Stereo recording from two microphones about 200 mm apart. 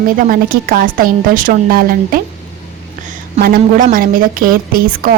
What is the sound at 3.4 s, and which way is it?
A woman's voice, 45° right (ahead or behind).